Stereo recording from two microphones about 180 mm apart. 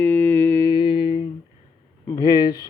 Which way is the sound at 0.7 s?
25° left (ahead or behind).